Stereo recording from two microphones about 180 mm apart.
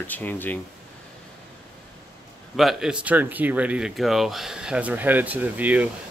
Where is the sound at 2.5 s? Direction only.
Centre (ahead or behind).